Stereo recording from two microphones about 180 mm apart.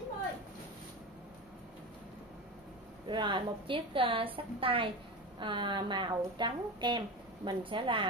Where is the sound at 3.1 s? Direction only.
25° right (ahead or behind).